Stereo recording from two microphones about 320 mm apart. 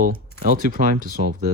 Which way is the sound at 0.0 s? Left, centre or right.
Right.